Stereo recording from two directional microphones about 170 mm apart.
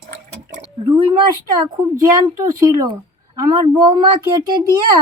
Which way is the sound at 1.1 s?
25° right (ahead or behind).